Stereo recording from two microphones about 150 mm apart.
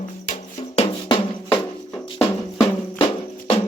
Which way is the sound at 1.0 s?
30° left (ahead or behind).